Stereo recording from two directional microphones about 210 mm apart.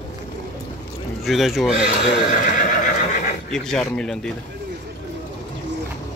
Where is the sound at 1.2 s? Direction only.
Centre (ahead or behind).